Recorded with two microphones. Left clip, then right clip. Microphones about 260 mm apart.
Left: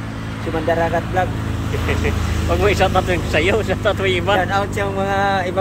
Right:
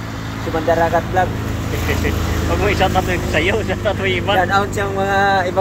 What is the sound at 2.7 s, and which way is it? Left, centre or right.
Speech, centre.